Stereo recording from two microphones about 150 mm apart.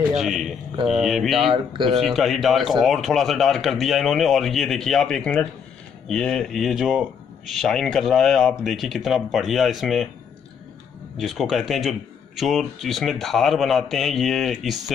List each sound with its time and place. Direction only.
0.2 s speech: centre (ahead or behind)
1.4 s speech: 35° right (ahead or behind)
2.1 s speech: centre (ahead or behind)
11.1 s speech: centre (ahead or behind)